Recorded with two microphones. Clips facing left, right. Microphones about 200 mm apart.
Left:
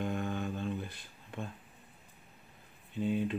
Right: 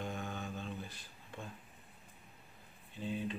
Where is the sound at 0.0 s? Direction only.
55° left (ahead or behind).